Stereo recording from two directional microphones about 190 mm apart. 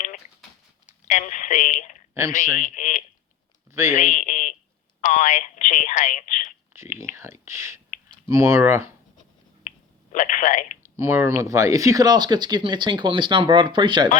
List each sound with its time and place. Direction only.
0.9 s speech: 40° left (ahead or behind)
3.7 s speech: 15° right (ahead or behind)
3.9 s speech: 40° left (ahead or behind)
6.7 s clicking: 15° right (ahead or behind)
7.2 s speech: 15° right (ahead or behind)
9.6 s finger snapping: 40° left (ahead or behind)
10.8 s speech: 15° right (ahead or behind)